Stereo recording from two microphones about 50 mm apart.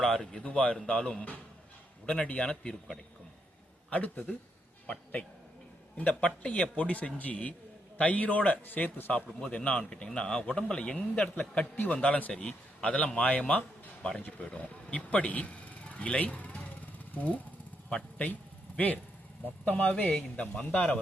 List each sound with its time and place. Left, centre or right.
0.0 s speech: centre
0.4 s a man's voice: left
3.9 s a man's voice: left
6.0 s a man's voice: left
9.4 s a man's voice: left
10.9 s a man's voice: left
17.8 s vehicle: left
19.6 s a man's voice: left